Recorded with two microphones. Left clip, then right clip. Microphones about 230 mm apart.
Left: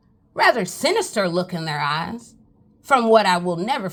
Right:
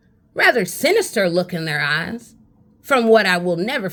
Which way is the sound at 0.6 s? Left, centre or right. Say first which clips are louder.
Right 3 dB; left.